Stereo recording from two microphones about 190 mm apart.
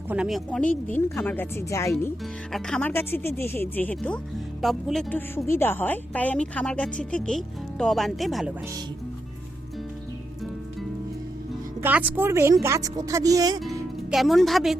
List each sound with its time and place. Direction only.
0.1 s speech: 5° right (ahead or behind); by 1.9 s 15° left (ahead or behind)
2.5 s a woman's voice: 5° left (ahead or behind)
11.8 s speech: 10° right (ahead or behind)
14.1 s a woman's voice: centre (ahead or behind)